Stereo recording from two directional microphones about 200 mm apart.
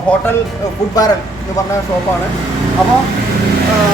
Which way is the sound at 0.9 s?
20° left (ahead or behind).